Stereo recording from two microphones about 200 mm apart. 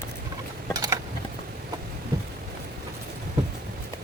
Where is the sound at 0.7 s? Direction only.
20° right (ahead or behind).